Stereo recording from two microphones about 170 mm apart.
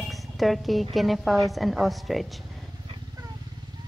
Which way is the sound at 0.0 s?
Centre (ahead or behind).